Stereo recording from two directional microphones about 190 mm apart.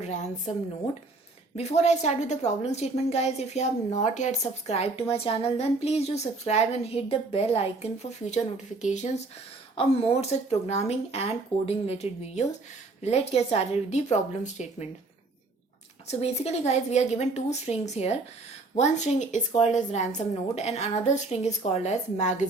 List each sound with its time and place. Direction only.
1.5 s a woman's voice: 35° left (ahead or behind)
16.0 s a woman's voice: 35° left (ahead or behind)